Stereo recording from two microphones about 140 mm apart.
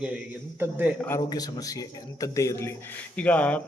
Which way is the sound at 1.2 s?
30° left (ahead or behind).